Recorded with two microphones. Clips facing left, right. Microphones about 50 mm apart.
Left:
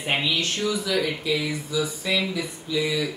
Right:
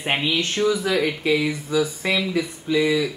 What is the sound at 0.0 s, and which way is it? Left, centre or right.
Speech, right.